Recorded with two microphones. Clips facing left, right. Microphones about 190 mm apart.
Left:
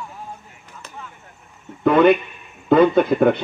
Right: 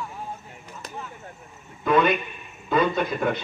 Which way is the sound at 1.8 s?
65° left (ahead or behind).